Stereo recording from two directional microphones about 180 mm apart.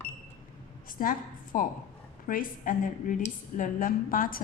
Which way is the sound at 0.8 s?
50° left (ahead or behind).